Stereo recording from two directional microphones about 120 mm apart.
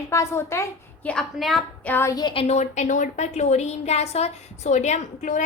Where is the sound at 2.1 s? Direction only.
45° left (ahead or behind).